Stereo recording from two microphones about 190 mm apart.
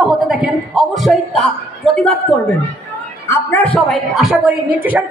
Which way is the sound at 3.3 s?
10° left (ahead or behind).